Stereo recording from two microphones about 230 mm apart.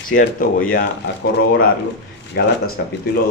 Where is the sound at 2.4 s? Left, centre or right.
Left.